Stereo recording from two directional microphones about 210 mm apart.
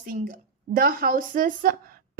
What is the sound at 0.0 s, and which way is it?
A woman's voice, 40° right (ahead or behind).